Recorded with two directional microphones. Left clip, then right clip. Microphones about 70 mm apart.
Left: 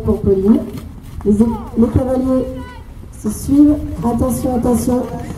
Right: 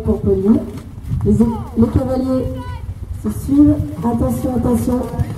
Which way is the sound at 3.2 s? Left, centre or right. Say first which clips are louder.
Left 1 dB; left.